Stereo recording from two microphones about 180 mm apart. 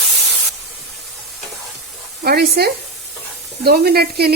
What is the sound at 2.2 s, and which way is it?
Speech, 60° right (ahead or behind).